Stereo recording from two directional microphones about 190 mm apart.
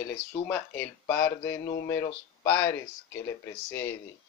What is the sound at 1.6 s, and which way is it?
Speech, 55° left (ahead or behind).